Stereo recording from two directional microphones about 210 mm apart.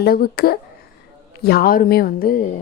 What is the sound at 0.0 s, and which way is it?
A woman's voice, 45° left (ahead or behind).